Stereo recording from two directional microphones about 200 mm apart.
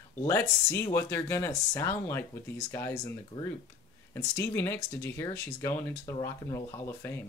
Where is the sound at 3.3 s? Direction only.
20° left (ahead or behind).